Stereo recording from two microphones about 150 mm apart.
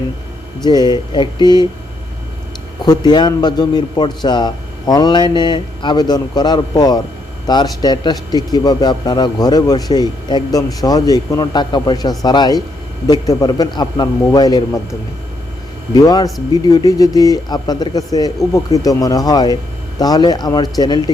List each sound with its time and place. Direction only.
0.6 s a man's voice: 30° left (ahead or behind)
2.8 s a man's voice: 30° left (ahead or behind)
16.0 s a man's voice: 25° left (ahead or behind)